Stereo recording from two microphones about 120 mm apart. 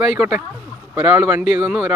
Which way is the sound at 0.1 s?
5° right (ahead or behind).